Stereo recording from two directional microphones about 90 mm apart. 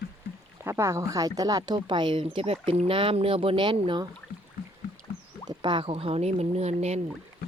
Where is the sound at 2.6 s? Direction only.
90° right; by 4.0 s 65° right (ahead or behind).